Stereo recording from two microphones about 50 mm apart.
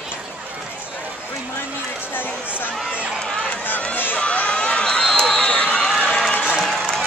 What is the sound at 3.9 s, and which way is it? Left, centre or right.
Run, left.